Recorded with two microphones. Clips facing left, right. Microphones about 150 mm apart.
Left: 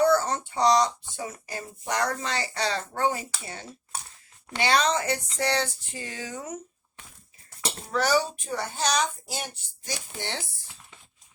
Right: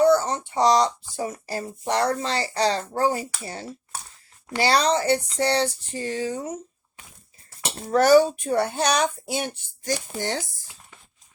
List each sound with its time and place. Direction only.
0.0 s speech: 20° right (ahead or behind)
7.9 s speech: 50° right (ahead or behind)